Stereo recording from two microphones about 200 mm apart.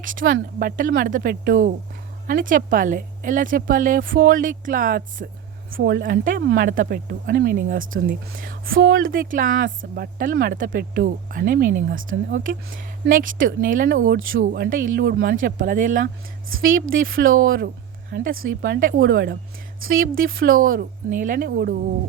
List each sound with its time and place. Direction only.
0.0 s speech: 45° right (ahead or behind)